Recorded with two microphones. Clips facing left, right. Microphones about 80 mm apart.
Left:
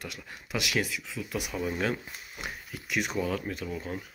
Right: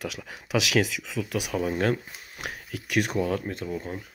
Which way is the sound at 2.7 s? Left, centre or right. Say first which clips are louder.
Right 6 dB; right.